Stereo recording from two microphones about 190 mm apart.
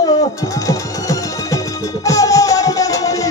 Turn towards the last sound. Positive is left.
turn(degrees=20)  # may be behind; listen again after turning